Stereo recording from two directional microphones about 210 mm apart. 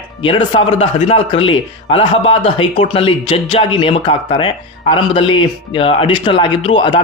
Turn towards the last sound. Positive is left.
turn(degrees=25)  # may be behind; listen again after turning